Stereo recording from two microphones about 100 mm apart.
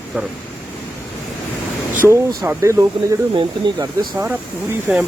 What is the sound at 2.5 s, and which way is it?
Speech, 30° right (ahead or behind).